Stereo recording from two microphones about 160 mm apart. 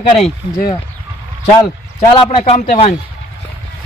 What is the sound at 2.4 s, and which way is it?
Speech, 40° left (ahead or behind).